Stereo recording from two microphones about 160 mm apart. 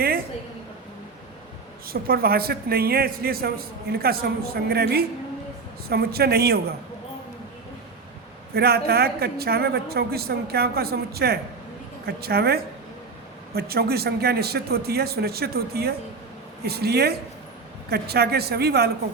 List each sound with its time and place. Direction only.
1.9 s a man's voice: 70° right (ahead or behind)
8.5 s a man's voice: 80° right